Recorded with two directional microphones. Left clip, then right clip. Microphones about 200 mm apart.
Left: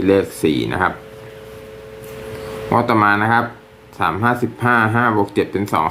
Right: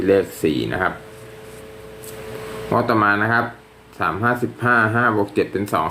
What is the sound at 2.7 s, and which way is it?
Speech, 15° left (ahead or behind).